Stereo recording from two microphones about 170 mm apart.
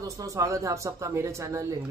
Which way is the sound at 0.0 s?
20° right (ahead or behind).